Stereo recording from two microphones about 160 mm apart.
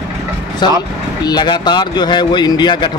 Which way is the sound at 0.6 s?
30° left (ahead or behind).